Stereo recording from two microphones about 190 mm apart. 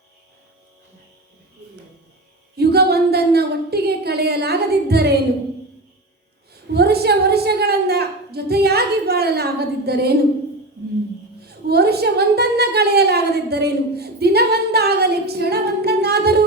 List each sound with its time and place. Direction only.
2.6 s a woman's voice: 55° right (ahead or behind)
6.5 s a woman's voice: 55° right (ahead or behind)
11.4 s a woman's voice: 55° right (ahead or behind)